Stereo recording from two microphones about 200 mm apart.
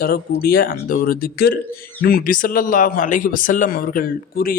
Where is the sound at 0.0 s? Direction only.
50° left (ahead or behind).